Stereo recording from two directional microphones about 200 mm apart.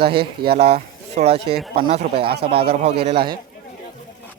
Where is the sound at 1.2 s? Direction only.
30° right (ahead or behind).